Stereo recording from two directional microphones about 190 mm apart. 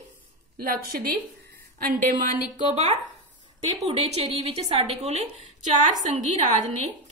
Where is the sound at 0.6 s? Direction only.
50° right (ahead or behind).